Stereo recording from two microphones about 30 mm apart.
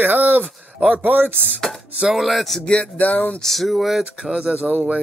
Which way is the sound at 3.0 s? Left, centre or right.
Left.